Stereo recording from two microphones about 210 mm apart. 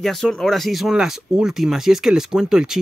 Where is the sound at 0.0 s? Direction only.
Centre (ahead or behind).